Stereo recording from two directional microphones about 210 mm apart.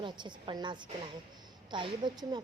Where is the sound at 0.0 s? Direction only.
20° right (ahead or behind).